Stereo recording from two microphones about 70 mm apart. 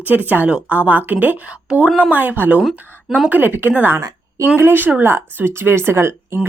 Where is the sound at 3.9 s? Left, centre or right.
Right.